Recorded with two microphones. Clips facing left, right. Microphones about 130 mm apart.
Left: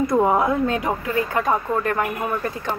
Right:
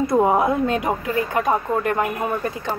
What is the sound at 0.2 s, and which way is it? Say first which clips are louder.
Speech: right 2 dB; 25° right (ahead or behind).